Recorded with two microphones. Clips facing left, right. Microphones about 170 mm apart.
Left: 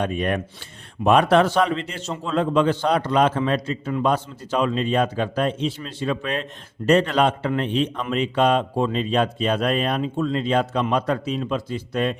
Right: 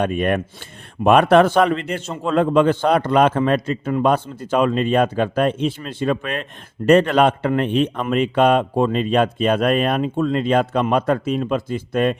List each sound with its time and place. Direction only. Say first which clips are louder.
0.0 s a man's voice: right 4 dB; 55° right (ahead or behind)